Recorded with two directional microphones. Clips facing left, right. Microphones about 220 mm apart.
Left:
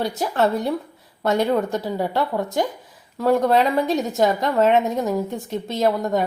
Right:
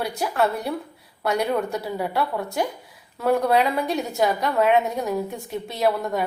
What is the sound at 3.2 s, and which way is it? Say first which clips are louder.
A woman's voice: left 2 dB; 20° left (ahead or behind).